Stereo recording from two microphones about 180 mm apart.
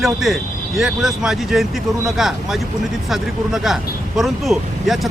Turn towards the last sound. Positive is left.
turn(degrees=0)  # may be behind; listen again after turning